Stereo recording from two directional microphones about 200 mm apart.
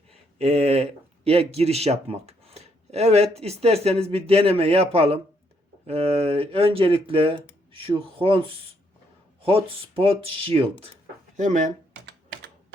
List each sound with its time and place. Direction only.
0.3 s speech: 30° right (ahead or behind)
11.3 s speech: 40° right (ahead or behind)